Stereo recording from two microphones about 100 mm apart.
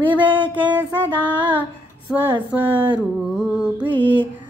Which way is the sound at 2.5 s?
20° right (ahead or behind).